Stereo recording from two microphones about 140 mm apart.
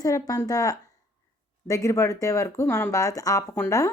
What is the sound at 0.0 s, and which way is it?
A woman's voice, 25° left (ahead or behind).